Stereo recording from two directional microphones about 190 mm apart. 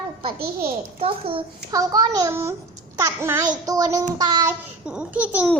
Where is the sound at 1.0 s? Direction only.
30° right (ahead or behind).